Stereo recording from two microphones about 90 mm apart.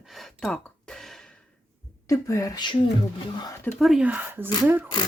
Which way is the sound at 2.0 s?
35° left (ahead or behind).